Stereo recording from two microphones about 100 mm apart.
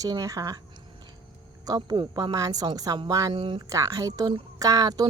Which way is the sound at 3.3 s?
60° right (ahead or behind).